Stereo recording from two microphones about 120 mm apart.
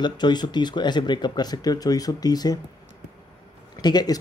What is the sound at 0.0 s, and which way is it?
Speech, 40° left (ahead or behind).